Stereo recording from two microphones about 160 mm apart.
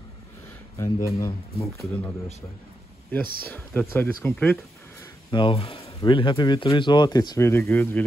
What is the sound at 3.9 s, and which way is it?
Speech, 15° left (ahead or behind).